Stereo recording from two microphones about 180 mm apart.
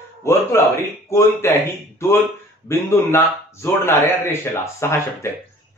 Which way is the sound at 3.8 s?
15° left (ahead or behind).